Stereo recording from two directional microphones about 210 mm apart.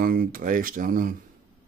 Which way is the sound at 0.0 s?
45° right (ahead or behind).